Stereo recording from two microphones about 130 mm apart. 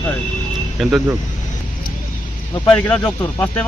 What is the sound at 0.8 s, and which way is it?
Speech, centre (ahead or behind).